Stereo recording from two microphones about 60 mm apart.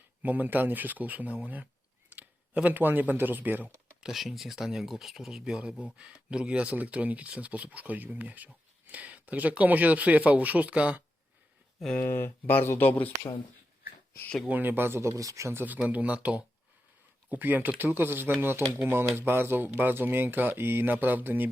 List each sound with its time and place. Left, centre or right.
0.2 s speech: right
4.0 s speech: centre; by 11.0 s right
11.9 s speech: left
14.4 s speech: right
15.1 s speech: right
15.8 s speech: right